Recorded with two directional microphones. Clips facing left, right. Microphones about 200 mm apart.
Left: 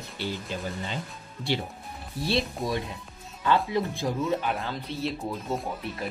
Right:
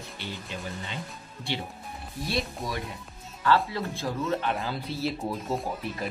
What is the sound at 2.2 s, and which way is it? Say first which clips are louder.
Speech: left 4 dB; 25° left (ahead or behind).